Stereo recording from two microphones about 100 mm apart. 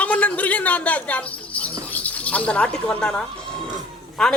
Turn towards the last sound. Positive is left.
turn(degrees=5)  # may be behind; listen again after turning